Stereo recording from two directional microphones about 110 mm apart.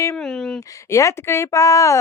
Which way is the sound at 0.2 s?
5° left (ahead or behind).